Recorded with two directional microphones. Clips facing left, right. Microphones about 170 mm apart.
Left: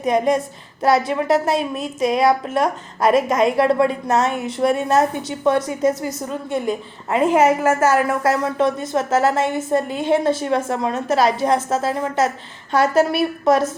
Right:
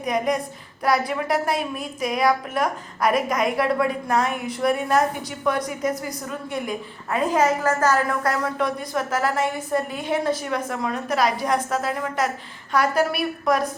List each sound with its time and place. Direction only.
0.0 s a woman's voice: 25° left (ahead or behind)
7.8 s speech: 10° left (ahead or behind)
8.2 s a woman's voice: 25° left (ahead or behind)